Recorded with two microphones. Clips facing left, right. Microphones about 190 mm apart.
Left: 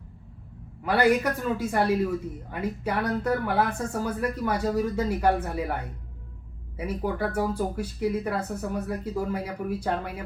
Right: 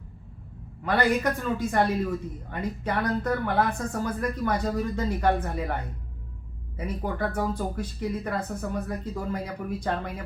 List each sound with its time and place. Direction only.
0.9 s speech: 10° left (ahead or behind)
6.7 s speech: 10° left (ahead or behind)